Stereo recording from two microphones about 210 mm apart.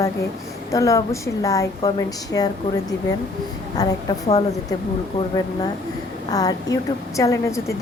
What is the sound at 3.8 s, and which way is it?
Speech, 20° left (ahead or behind).